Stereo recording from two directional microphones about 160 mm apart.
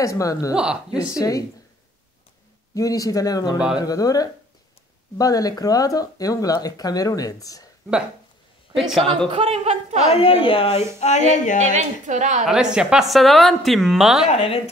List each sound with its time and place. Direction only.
0.0 s speech: 20° left (ahead or behind)
2.7 s speech: 20° left (ahead or behind)
8.7 s a woman's voice: centre (ahead or behind)
9.3 s speech: 40° right (ahead or behind)
10.1 s speech: 35° left (ahead or behind)
11.6 s a woman's voice: 50° right (ahead or behind)
12.4 s a woman's voice: 5° right (ahead or behind)
14.3 s speech: 35° left (ahead or behind)